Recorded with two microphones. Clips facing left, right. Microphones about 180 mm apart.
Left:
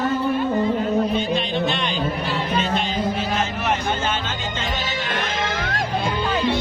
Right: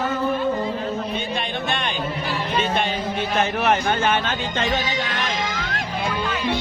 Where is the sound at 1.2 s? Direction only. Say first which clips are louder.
Left 5 dB; 50° right (ahead or behind).